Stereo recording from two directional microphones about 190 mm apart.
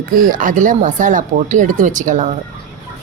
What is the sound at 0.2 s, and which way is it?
Speech, 45° right (ahead or behind).